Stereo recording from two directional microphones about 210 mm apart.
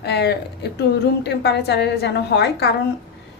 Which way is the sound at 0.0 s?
50° left (ahead or behind).